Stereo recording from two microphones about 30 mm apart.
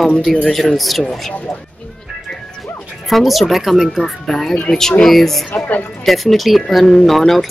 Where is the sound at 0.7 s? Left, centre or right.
Centre.